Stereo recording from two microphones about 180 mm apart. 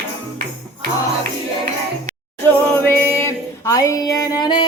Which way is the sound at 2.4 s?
10° left (ahead or behind).